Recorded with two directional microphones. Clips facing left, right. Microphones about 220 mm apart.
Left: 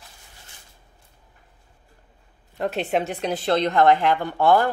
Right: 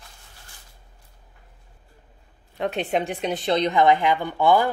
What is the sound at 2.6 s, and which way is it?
A woman's voice, centre (ahead or behind).